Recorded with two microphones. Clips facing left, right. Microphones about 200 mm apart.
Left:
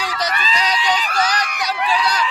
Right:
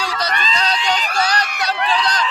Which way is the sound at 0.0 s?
15° left (ahead or behind).